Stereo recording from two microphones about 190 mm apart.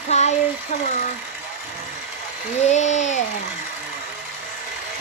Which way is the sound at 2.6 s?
35° left (ahead or behind).